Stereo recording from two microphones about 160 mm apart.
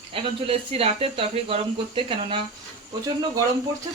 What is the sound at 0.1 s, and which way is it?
Speech, 35° right (ahead or behind).